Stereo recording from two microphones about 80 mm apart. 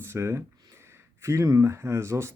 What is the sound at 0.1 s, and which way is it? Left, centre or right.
Speech, right.